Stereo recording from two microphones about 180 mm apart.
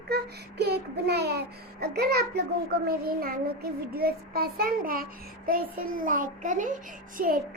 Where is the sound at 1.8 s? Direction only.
60° right (ahead or behind).